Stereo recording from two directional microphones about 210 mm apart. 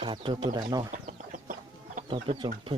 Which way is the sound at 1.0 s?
40° right (ahead or behind).